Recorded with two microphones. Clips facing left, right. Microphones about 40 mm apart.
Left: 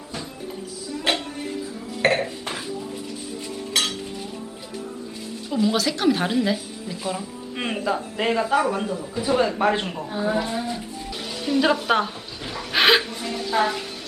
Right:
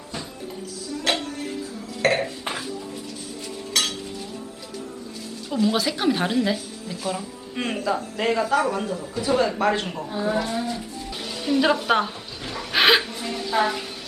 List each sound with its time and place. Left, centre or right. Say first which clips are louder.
1.1 s music: left 1 dB; centre
2.0 s a sound: left 1 dB; centre
5.5 s music: even; centre
5.7 s a woman's voice: left 1 dB; centre
12.5 s dog: even; centre